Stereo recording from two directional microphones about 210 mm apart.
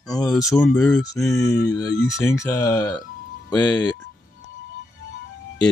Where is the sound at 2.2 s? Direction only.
15° left (ahead or behind).